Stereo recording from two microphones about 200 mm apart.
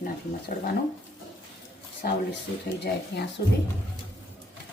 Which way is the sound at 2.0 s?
50° left (ahead or behind).